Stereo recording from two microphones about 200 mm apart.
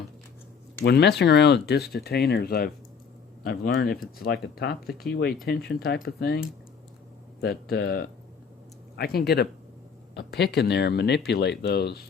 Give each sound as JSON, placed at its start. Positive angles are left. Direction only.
{"t": 0.9, "sound": "speech", "side_deg": 55}